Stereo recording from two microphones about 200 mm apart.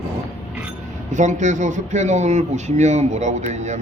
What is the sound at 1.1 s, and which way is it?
Speech, 40° right (ahead or behind).